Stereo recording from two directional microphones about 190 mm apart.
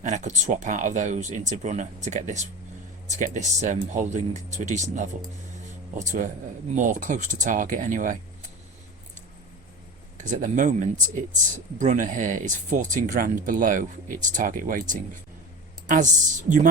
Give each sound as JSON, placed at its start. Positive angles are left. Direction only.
{"t": 0.0, "sound": "speech", "side_deg": -40}
{"t": 10.2, "sound": "speech", "side_deg": -40}